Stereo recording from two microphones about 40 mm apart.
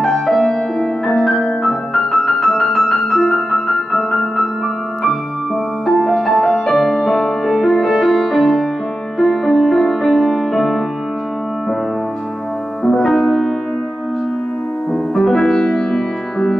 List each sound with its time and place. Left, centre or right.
0.0 s music: centre
5.9 s music: centre
12.8 s music: centre
15.1 s music: centre